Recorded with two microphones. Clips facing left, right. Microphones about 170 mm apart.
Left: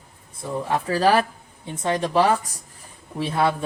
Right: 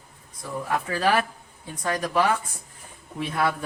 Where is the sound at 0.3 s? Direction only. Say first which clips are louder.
Left 3 dB; 25° left (ahead or behind).